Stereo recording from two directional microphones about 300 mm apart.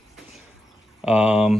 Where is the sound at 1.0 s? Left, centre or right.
Centre.